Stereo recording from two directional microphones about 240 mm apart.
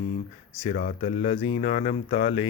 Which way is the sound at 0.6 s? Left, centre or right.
Left.